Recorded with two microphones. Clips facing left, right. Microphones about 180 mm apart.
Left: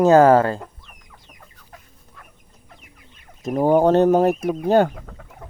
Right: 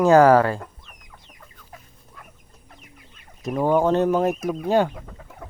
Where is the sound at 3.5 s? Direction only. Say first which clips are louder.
Left 4 dB; 40° left (ahead or behind).